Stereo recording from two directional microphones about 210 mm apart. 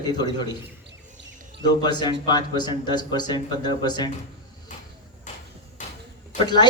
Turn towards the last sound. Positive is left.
turn(degrees=35)  # may be behind; listen again after turning